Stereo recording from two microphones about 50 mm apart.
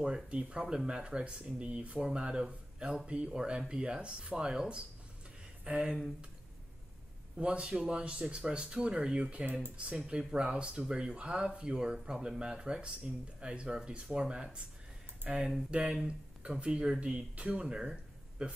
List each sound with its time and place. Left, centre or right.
0.0 s speech: right
3.1 s speech: right
7.3 s speech: right